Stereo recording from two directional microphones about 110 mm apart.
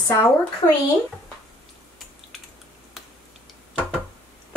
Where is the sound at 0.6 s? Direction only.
20° left (ahead or behind).